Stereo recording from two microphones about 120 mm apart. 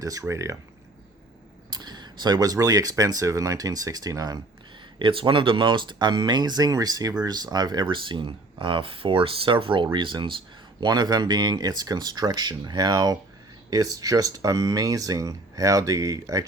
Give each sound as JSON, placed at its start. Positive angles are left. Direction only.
{"t": 0.0, "sound": "speech", "side_deg": -30}
{"t": 1.7, "sound": "speech", "side_deg": -35}
{"t": 4.9, "sound": "speech", "side_deg": -45}